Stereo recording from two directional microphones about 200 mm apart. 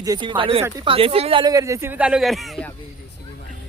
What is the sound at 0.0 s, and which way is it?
Speech, 20° right (ahead or behind).